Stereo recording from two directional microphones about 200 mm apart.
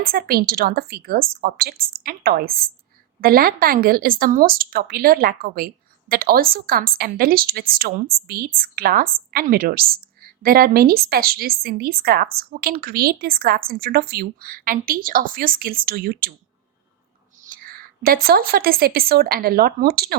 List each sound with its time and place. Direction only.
0.0 s a woman's voice: 50° right (ahead or behind)
17.4 s a woman's voice: 45° right (ahead or behind)